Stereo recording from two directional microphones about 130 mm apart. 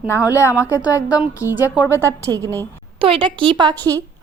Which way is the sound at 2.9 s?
45° right (ahead or behind).